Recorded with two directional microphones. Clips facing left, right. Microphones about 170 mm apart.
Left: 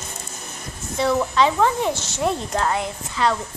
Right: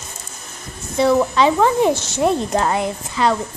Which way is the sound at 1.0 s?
5° right (ahead or behind).